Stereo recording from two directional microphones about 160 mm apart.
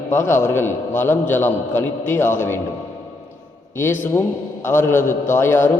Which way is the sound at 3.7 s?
15° left (ahead or behind).